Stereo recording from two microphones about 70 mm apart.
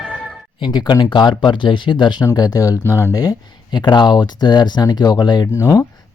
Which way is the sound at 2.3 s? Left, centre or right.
Left.